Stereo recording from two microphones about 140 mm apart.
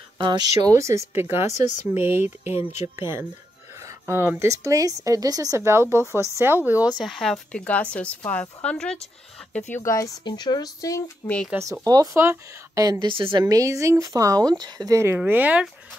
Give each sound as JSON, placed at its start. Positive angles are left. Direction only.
{"t": 0.2, "sound": "a woman's voice", "side_deg": -30}
{"t": 2.4, "sound": "speech", "side_deg": 50}
{"t": 3.0, "sound": "a woman's voice", "side_deg": -15}
{"t": 7.0, "sound": "speech", "side_deg": 0}
{"t": 9.7, "sound": "speech", "side_deg": 20}
{"t": 11.8, "sound": "a woman's voice", "side_deg": -25}
{"t": 13.1, "sound": "a woman's voice", "side_deg": -40}